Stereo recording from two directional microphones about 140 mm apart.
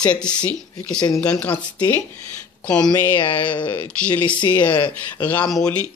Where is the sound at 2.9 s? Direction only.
15° left (ahead or behind).